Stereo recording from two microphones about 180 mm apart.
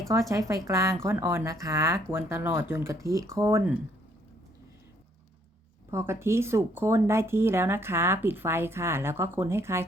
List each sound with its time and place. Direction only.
0.1 s speech: 15° right (ahead or behind)
5.9 s speech: 15° right (ahead or behind)